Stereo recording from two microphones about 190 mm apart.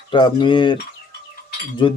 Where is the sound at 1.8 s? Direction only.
25° left (ahead or behind).